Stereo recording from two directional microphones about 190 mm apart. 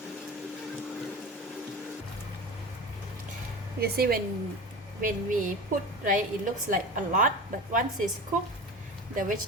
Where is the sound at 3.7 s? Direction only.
55° right (ahead or behind).